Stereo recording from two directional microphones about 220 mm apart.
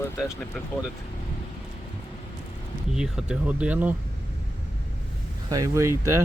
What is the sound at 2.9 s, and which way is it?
Speech, centre (ahead or behind).